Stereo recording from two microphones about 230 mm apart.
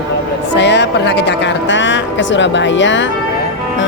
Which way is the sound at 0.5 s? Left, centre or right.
Left.